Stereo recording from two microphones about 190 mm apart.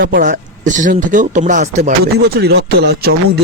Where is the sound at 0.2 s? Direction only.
40° right (ahead or behind).